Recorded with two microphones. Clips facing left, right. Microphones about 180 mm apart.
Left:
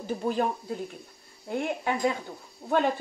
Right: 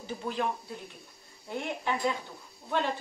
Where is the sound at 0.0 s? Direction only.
45° left (ahead or behind).